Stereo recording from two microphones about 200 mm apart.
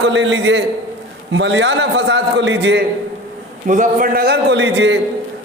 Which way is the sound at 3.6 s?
40° right (ahead or behind).